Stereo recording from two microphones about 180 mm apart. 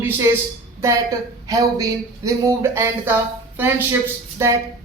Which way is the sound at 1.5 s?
20° right (ahead or behind).